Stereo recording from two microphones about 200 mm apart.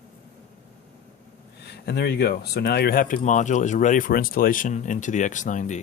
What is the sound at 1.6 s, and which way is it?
Speech, 55° left (ahead or behind).